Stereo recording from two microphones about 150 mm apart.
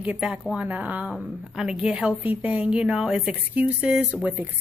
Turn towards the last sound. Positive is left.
turn(degrees=-10)  # may be behind; listen again after turning